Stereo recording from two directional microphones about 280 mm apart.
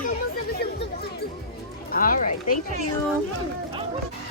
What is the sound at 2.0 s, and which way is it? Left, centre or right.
Speech, left.